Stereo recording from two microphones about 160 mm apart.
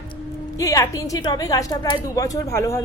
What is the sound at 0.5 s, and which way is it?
A woman's voice, 20° left (ahead or behind).